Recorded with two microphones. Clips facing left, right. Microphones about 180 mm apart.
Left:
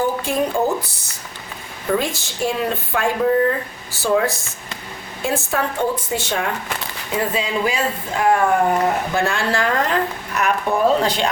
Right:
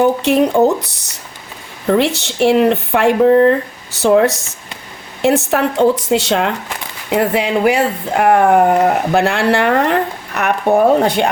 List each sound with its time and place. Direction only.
0.0 s speech: 75° right (ahead or behind)
7.1 s speech: 70° right (ahead or behind)